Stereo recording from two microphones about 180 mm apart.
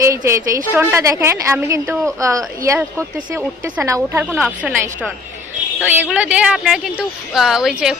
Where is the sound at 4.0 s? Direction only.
Centre (ahead or behind).